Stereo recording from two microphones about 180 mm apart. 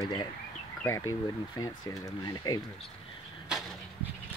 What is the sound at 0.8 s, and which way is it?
Speech, 20° left (ahead or behind).